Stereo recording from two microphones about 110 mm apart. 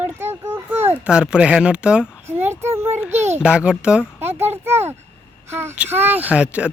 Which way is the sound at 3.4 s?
10° right (ahead or behind).